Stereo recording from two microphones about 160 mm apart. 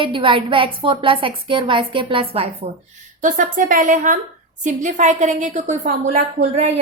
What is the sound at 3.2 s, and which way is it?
A woman's voice, 55° right (ahead or behind).